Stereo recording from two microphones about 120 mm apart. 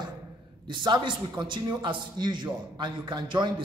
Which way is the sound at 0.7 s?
40° right (ahead or behind).